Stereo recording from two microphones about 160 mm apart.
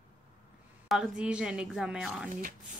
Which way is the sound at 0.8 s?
Centre (ahead or behind).